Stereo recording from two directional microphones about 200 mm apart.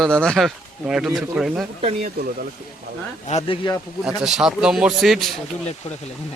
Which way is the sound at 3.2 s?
35° left (ahead or behind).